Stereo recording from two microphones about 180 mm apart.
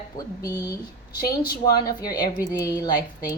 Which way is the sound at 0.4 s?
20° left (ahead or behind).